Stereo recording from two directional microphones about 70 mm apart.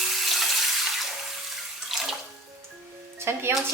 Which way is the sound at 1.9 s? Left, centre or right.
Centre.